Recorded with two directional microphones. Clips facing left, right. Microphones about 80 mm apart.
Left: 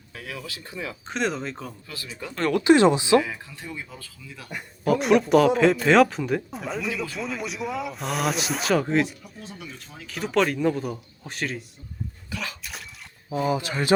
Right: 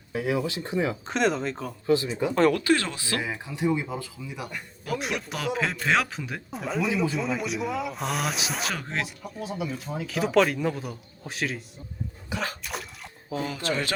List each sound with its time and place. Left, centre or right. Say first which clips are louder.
0.1 s speech: right 10 dB; right
1.0 s a man's voice: right 2 dB; centre
1.9 s speech: right 14 dB; right
2.3 s a man's voice: right 3 dB; centre
2.6 s speech: left 8 dB; left
3.2 s speech: right 9 dB; centre
4.9 s a man's voice: left 12 dB; centre
12.6 s a sound: right 4 dB; centre
13.3 s speech: left 3 dB; centre